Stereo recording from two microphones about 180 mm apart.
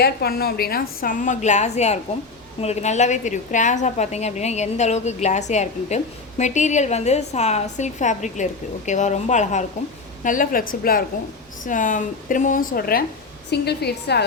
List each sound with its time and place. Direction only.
0.0 s a woman's voice: 60° left (ahead or behind)
13.5 s a woman's voice: 65° left (ahead or behind)